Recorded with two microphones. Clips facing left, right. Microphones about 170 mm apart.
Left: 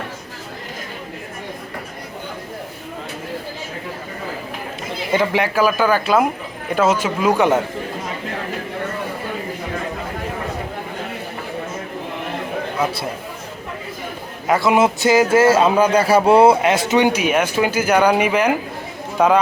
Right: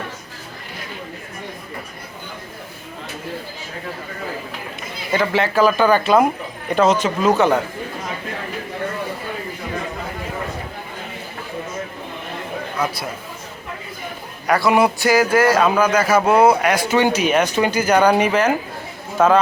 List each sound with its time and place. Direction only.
5.1 s speech: 15° left (ahead or behind)
14.4 s speech: 20° left (ahead or behind)